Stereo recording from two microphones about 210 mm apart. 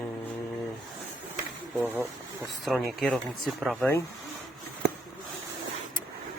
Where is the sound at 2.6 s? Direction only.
Centre (ahead or behind).